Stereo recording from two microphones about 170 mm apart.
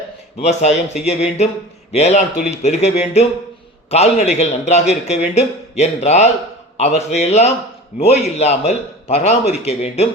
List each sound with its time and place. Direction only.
0.4 s a man's voice: 40° left (ahead or behind)